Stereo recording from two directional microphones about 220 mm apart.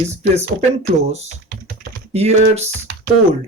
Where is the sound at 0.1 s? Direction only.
30° right (ahead or behind).